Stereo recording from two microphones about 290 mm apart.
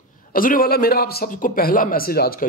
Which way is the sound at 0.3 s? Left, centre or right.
Left.